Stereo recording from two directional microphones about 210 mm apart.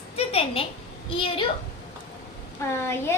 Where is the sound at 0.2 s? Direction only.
25° left (ahead or behind).